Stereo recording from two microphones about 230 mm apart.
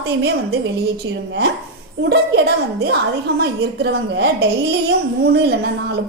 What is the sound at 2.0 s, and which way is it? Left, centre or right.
A woman's voice, right.